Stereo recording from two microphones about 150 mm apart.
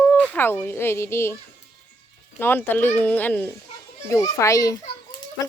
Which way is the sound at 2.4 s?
15° left (ahead or behind).